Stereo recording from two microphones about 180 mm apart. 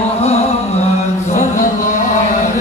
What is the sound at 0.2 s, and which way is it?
Music, 35° left (ahead or behind).